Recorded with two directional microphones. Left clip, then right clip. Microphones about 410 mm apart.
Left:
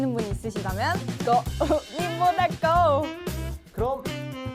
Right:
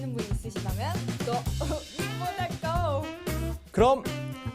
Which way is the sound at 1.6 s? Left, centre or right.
Left.